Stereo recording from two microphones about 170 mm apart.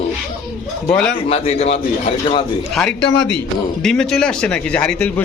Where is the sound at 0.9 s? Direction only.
5° left (ahead or behind).